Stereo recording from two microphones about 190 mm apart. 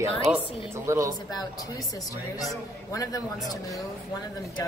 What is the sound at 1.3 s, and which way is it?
Speech, 20° left (ahead or behind).